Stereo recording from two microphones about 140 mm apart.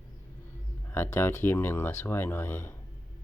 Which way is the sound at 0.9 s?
15° left (ahead or behind).